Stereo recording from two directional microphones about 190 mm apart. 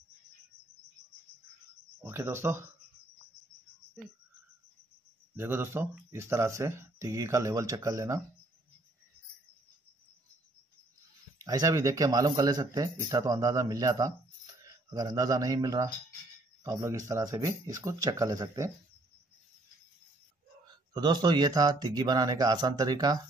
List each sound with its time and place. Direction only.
2.0 s speech: 15° right (ahead or behind)
5.3 s speech: 15° right (ahead or behind)
11.3 s speech: 20° right (ahead or behind)
20.6 s speech: 20° right (ahead or behind)